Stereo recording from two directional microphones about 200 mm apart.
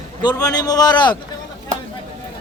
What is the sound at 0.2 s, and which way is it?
A man's voice, 20° left (ahead or behind).